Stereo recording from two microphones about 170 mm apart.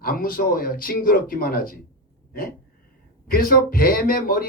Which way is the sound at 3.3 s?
60° left (ahead or behind).